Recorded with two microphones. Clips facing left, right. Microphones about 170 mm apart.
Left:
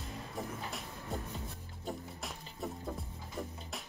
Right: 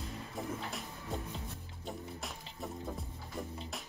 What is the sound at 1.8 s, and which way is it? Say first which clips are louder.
Music: left 1 dB; centre (ahead or behind).